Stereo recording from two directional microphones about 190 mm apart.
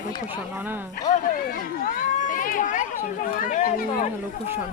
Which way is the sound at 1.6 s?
45° left (ahead or behind).